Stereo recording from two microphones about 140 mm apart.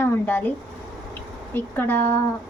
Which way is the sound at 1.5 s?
15° left (ahead or behind).